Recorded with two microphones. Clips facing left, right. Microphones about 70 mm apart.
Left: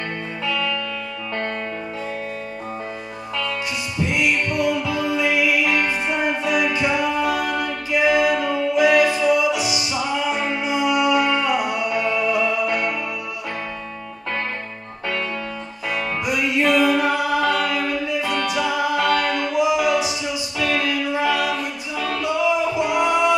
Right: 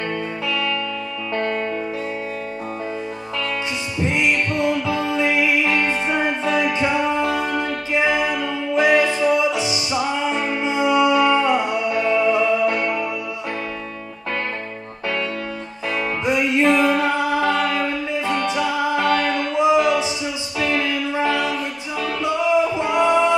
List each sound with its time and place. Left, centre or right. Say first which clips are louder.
4.0 s music: right 1 dB; right
16.3 s music: right 3 dB; right
19.0 s mantra: right 1 dB; right
19.5 s music: right 3 dB; right
21.5 s music: even; centre
22.2 s music: right 2 dB; right